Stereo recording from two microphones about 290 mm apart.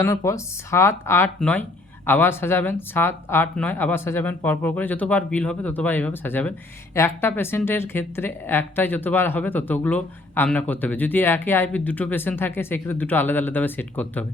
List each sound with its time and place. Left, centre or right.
0.0 s speech: centre